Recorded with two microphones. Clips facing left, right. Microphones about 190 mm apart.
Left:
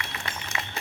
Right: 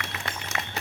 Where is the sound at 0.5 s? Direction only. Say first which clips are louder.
Right 1 dB; 50° right (ahead or behind).